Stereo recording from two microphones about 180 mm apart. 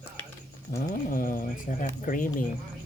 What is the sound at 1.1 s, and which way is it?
Speech, 50° left (ahead or behind).